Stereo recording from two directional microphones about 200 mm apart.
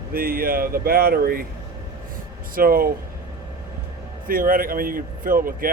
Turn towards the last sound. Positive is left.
turn(degrees=-45)  # may be behind; listen again after turning